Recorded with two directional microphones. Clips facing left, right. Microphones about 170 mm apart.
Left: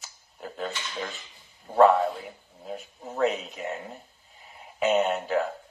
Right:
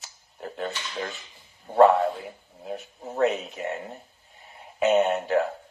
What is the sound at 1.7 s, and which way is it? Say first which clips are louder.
Speech: right 1 dB; 15° right (ahead or behind).